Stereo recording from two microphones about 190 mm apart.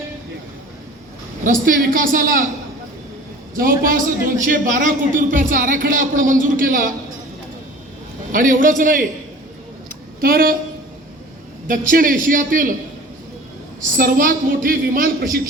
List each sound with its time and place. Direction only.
1.5 s a man's voice: 45° right (ahead or behind)
3.5 s a man's voice: 45° right (ahead or behind)
8.3 s a man's voice: 45° right (ahead or behind)
10.2 s a man's voice: 50° right (ahead or behind)
11.7 s a man's voice: 45° right (ahead or behind)
13.9 s a man's voice: 45° right (ahead or behind)